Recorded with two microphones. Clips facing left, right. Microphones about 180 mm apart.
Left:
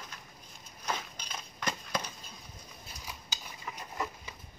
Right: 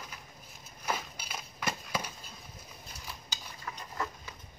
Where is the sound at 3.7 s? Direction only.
15° left (ahead or behind).